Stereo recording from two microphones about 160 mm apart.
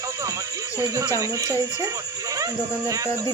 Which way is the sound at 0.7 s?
20° right (ahead or behind).